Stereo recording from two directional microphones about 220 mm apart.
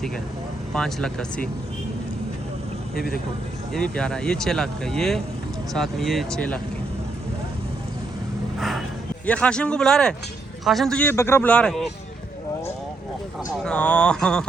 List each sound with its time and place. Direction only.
0.7 s speech: centre (ahead or behind)
3.7 s speech: 5° left (ahead or behind)
8.5 s a sound: centre (ahead or behind)
9.2 s speech: 5° left (ahead or behind)
13.7 s speech: 5° left (ahead or behind)